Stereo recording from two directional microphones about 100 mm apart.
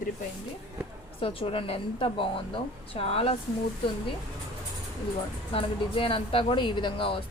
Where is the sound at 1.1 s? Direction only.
65° left (ahead or behind).